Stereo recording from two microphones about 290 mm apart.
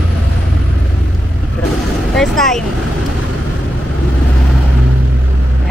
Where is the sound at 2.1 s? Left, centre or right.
Centre.